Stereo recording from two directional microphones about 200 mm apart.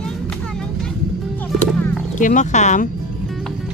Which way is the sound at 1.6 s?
5° left (ahead or behind).